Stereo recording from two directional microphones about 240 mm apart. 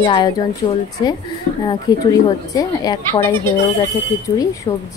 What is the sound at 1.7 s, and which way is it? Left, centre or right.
A woman's voice, centre.